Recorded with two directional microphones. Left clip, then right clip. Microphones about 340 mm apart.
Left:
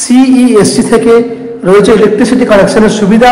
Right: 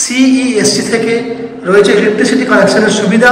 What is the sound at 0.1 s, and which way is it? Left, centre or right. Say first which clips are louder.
A man's voice: left 7 dB; centre.